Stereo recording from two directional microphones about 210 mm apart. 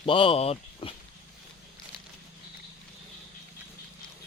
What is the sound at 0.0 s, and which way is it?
Speech, 25° left (ahead or behind).